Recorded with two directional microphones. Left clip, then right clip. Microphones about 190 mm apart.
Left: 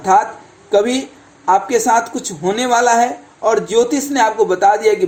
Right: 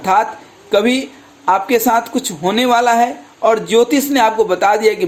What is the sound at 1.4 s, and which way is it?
A man's voice, 20° right (ahead or behind).